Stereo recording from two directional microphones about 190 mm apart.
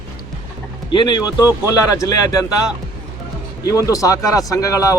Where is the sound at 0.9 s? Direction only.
25° left (ahead or behind).